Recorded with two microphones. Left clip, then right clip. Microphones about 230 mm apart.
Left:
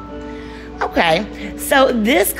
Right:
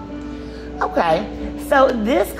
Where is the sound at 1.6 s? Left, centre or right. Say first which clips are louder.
Left 1 dB; left.